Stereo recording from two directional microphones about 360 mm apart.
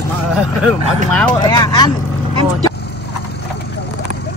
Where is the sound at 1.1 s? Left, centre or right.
Centre.